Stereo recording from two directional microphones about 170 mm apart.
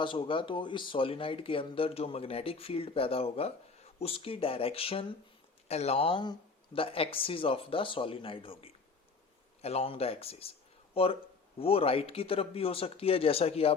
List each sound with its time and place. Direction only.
0.0 s speech: 30° left (ahead or behind)